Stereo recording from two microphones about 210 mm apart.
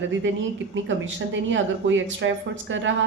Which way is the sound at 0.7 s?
60° right (ahead or behind).